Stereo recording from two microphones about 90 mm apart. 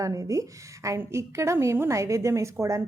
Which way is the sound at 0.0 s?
40° right (ahead or behind).